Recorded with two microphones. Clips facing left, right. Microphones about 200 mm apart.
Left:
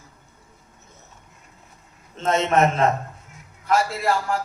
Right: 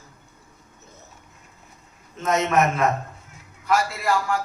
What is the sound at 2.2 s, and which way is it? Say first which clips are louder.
A man's voice: left 1 dB; 30° left (ahead or behind).